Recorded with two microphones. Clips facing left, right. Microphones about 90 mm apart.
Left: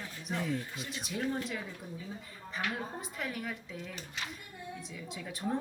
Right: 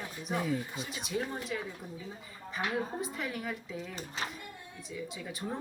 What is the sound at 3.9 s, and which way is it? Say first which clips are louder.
Speech: right 4 dB; 40° right (ahead or behind).